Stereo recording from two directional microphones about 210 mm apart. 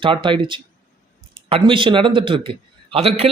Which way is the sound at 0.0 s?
25° right (ahead or behind).